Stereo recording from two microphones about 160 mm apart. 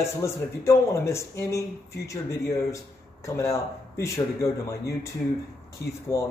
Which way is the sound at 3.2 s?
20° left (ahead or behind).